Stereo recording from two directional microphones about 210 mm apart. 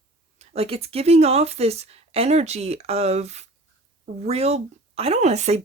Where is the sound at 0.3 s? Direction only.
30° right (ahead or behind).